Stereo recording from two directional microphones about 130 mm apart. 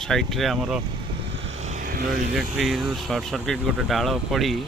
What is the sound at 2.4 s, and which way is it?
Speech, 5° right (ahead or behind).